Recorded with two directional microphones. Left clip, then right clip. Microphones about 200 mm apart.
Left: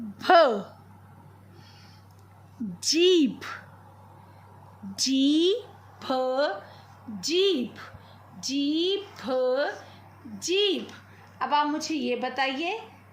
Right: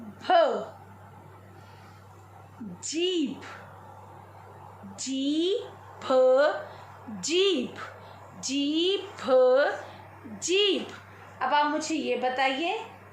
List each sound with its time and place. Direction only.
0.2 s a sound: 55° left (ahead or behind)
2.8 s a woman's voice: 55° left (ahead or behind)
4.9 s a woman's voice: 50° left (ahead or behind)
6.0 s a woman's voice: 30° left (ahead or behind)